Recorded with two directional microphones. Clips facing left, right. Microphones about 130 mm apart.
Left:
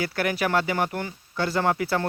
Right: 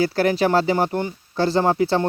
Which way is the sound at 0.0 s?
30° right (ahead or behind).